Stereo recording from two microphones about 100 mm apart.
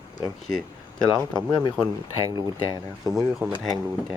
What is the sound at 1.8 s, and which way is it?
Speech, 10° left (ahead or behind).